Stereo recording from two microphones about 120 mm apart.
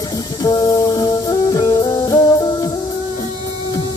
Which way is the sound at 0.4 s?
30° left (ahead or behind).